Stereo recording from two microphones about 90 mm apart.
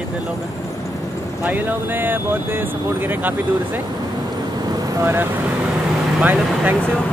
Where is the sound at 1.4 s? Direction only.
20° right (ahead or behind).